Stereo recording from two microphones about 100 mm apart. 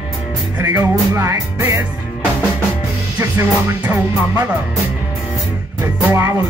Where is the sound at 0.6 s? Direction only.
30° right (ahead or behind).